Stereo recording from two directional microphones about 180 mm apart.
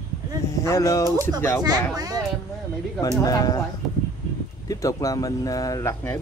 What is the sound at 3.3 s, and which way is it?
Speech, 20° left (ahead or behind).